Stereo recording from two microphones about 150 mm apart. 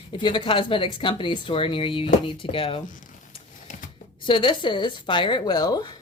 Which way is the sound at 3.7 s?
60° left (ahead or behind).